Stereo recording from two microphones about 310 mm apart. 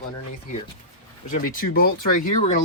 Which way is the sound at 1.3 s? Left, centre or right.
Left.